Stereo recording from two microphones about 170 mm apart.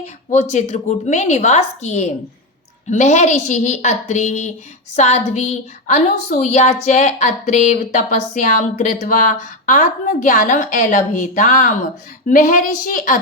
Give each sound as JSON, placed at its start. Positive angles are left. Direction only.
{"t": 0.0, "sound": "a woman's voice", "side_deg": 45}